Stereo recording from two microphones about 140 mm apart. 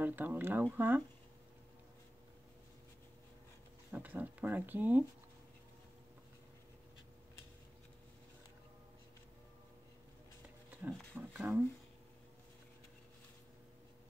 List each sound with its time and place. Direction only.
0.0 s speech: 15° right (ahead or behind)
3.9 s speech: 10° right (ahead or behind)
11.1 s a sound: 15° right (ahead or behind)